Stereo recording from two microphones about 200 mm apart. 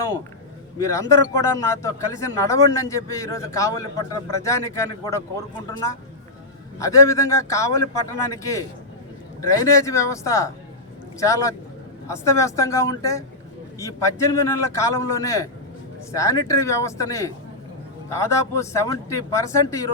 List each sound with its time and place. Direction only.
0.8 s a man's voice: 15° left (ahead or behind)
6.7 s a man's voice: 15° left (ahead or behind)